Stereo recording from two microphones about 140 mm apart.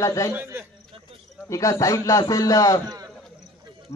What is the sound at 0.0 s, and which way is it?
Speech, 20° left (ahead or behind).